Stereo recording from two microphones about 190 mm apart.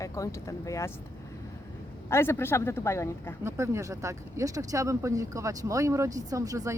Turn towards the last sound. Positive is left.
turn(degrees=-15)  # may be behind; listen again after turning